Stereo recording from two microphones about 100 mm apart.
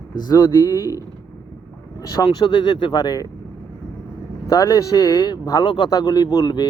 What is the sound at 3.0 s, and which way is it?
Speech, 40° left (ahead or behind).